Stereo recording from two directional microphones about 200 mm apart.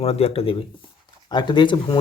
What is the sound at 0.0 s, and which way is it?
Speech, 30° left (ahead or behind).